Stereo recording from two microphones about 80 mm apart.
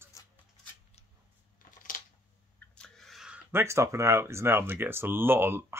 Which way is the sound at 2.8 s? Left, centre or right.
Centre.